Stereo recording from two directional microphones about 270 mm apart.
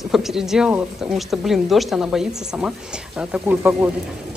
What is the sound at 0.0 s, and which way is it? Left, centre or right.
Speech, centre.